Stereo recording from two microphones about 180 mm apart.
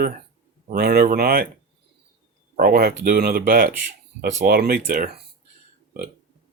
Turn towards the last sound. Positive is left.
turn(degrees=-55)  # may be behind; listen again after turning